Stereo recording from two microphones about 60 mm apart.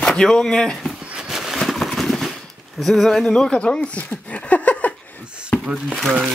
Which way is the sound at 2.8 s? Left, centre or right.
Centre.